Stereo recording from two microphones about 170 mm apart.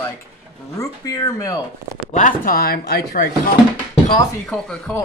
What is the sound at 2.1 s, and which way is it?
Speech, 50° left (ahead or behind).